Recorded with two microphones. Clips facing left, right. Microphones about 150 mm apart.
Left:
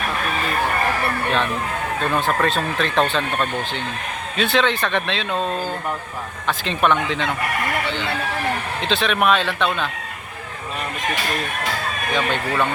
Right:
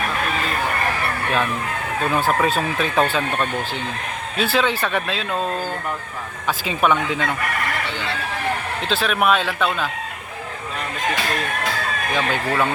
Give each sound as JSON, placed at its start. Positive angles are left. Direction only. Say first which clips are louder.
{"t": 2.0, "sound": "speech", "louder": "right 2 dB", "side_deg": -5}
{"t": 6.5, "sound": "speech", "louder": "even", "side_deg": -10}
{"t": 8.8, "sound": "speech", "louder": "left 1 dB", "side_deg": -5}
{"t": 12.1, "sound": "speech", "louder": "even", "side_deg": -5}